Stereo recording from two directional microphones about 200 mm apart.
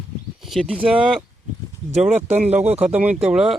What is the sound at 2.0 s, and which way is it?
Speech, 35° right (ahead or behind).